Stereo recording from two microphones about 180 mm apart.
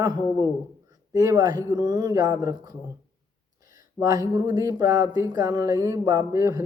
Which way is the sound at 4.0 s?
20° right (ahead or behind).